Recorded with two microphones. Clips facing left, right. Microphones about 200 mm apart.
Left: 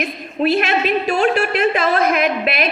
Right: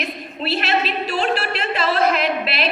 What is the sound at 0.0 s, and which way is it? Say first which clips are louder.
A woman's voice: left 8 dB; 50° left (ahead or behind).